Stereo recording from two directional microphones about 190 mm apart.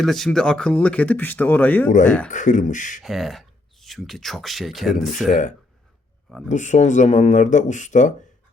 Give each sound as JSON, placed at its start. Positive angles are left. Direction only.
{"t": 0.0, "sound": "speech", "side_deg": 0}
{"t": 2.3, "sound": "speech", "side_deg": 40}
{"t": 3.0, "sound": "speech", "side_deg": 0}
{"t": 5.2, "sound": "speech", "side_deg": 40}